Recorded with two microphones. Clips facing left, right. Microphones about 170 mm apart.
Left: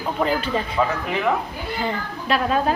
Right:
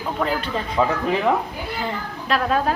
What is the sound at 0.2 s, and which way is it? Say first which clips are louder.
Speech: left 3 dB; 5° left (ahead or behind).